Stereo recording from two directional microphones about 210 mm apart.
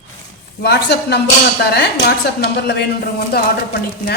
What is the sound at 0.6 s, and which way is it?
A woman's voice, 50° left (ahead or behind).